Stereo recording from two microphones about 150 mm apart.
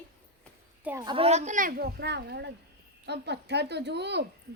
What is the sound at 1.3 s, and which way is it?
A child's voice, 50° right (ahead or behind).